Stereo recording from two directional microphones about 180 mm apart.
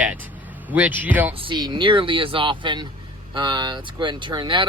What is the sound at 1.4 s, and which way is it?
Speech, 25° right (ahead or behind).